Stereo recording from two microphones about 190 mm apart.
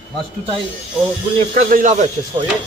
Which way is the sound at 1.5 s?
45° right (ahead or behind).